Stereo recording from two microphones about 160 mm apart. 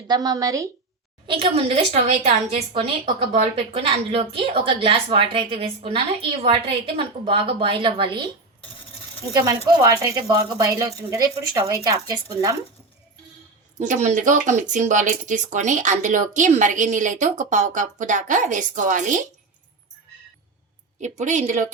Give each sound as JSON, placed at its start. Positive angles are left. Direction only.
{"t": 0.1, "sound": "speech", "side_deg": -20}
{"t": 1.3, "sound": "speech", "side_deg": -35}
{"t": 9.4, "sound": "speech", "side_deg": -25}
{"t": 13.7, "sound": "speech", "side_deg": -50}
{"t": 21.0, "sound": "speech", "side_deg": -45}